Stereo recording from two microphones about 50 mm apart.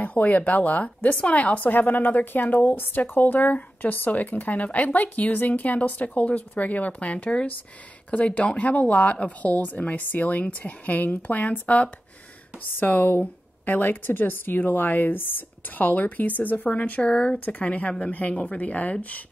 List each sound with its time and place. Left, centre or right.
0.0 s a woman's voice: left
17.1 s speech: centre
17.5 s a woman's voice: left